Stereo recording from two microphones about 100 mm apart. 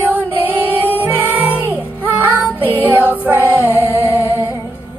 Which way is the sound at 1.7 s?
15° right (ahead or behind).